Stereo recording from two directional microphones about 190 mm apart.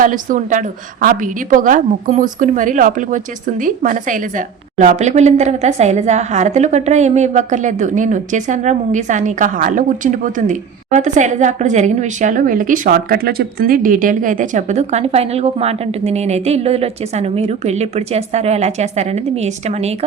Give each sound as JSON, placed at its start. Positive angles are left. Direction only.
{"t": 0.0, "sound": "a woman's voice", "side_deg": -45}